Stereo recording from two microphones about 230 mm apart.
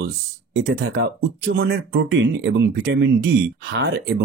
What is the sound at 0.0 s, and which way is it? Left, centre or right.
Speech, right.